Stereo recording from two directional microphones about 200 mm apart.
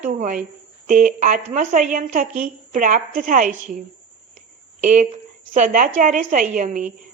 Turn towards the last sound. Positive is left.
turn(degrees=-40)  # may be behind; listen again after turning